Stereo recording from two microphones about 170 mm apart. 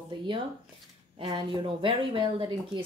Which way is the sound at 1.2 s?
30° right (ahead or behind).